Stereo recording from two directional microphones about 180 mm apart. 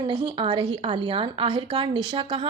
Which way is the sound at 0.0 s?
25° right (ahead or behind).